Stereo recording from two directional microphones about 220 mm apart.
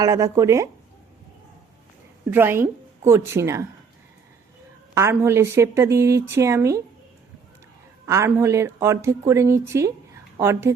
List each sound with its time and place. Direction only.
0.0 s a woman's voice: 15° right (ahead or behind)
2.3 s a woman's voice: 10° right (ahead or behind)
4.9 s a woman's voice: 10° right (ahead or behind)
8.0 s a woman's voice: 15° right (ahead or behind)